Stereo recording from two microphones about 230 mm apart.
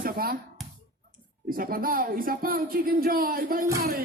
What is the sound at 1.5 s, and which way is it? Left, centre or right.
Speech, right.